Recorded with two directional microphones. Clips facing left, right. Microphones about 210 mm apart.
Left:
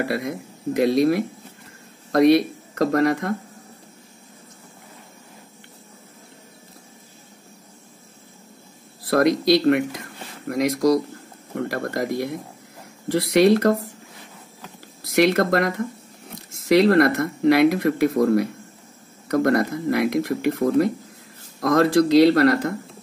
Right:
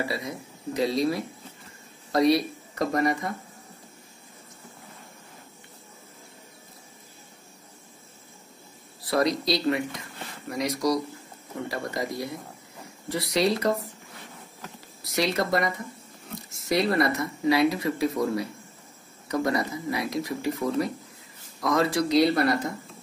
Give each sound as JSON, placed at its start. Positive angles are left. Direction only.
{"t": 0.0, "sound": "speech", "side_deg": 60}
{"t": 9.1, "sound": "speech", "side_deg": 60}
{"t": 11.5, "sound": "speech", "side_deg": 60}
{"t": 13.1, "sound": "speech", "side_deg": 65}
{"t": 15.1, "sound": "speech", "side_deg": 60}
{"t": 16.5, "sound": "speech", "side_deg": 80}